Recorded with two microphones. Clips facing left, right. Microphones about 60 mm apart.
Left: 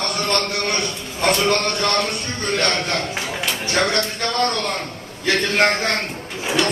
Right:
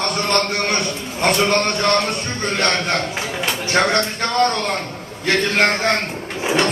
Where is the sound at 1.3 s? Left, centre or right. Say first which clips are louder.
Right 1 dB; right.